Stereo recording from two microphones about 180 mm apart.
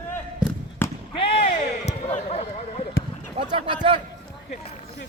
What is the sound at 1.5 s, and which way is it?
Basketball bounce, 40° left (ahead or behind).